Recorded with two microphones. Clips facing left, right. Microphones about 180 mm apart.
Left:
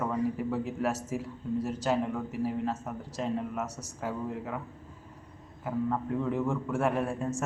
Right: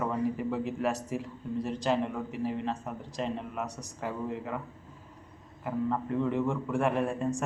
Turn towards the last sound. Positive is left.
turn(degrees=0)  # may be behind; listen again after turning